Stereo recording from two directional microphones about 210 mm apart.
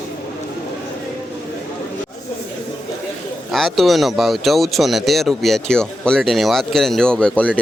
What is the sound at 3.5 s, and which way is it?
Speech, centre (ahead or behind).